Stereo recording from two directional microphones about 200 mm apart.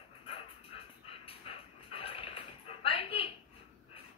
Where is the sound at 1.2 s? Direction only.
30° left (ahead or behind).